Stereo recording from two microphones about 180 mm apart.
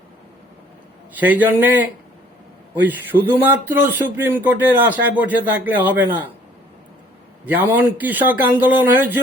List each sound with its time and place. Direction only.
1.1 s speech: 10° right (ahead or behind)
7.4 s speech: 10° right (ahead or behind)